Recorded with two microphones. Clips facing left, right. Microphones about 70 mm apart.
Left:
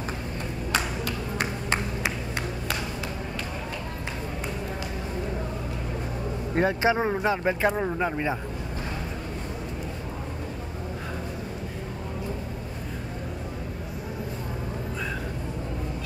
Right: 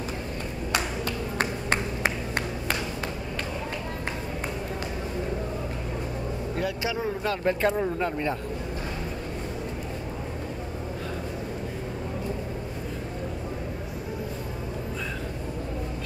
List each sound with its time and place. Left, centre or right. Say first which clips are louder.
1.0 s a sound: right 1 dB; right
6.5 s speech: left 8 dB; left
7.2 s speech: right 2 dB; centre